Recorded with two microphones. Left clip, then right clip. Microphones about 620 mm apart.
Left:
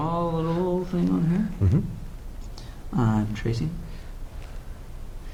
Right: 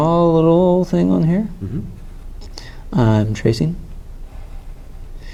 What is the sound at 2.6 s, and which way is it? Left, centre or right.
Speech, right.